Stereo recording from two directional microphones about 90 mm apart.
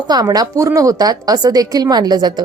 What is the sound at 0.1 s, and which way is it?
A woman's voice, 45° right (ahead or behind).